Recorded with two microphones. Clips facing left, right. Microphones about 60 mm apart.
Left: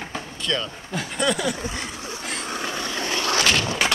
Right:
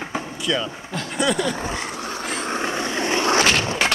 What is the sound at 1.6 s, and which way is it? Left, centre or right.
Vehicle, right.